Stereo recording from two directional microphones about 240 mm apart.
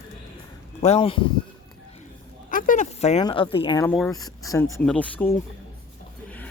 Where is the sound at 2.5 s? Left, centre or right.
Left.